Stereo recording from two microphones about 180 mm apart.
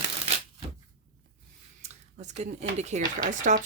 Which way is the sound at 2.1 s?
40° right (ahead or behind).